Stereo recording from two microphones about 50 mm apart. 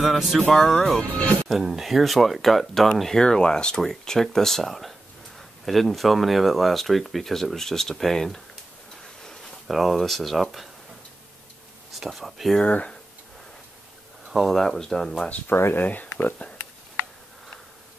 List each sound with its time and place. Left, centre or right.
0.0 s speech: centre
0.5 s speech: centre
1.0 s speech: left
1.5 s speech: centre
11.9 s speech: centre
12.5 s speech: left
14.5 s speech: centre
15.2 s speech: left
15.5 s speech: left
15.8 s speech: left